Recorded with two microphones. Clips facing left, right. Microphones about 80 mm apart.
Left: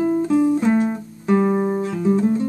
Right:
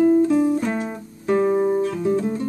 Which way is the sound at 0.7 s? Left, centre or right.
Centre.